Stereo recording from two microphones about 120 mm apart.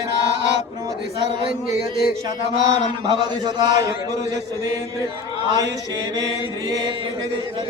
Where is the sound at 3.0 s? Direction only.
35° right (ahead or behind).